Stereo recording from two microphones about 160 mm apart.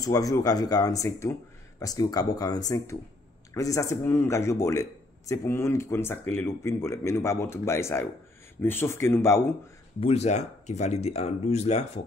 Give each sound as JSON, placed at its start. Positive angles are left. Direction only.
{"t": 0.0, "sound": "speech", "side_deg": 20}
{"t": 9.9, "sound": "speech", "side_deg": 40}